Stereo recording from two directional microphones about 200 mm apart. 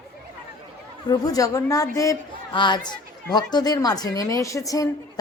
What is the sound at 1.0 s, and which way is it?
A woman's voice, 20° left (ahead or behind).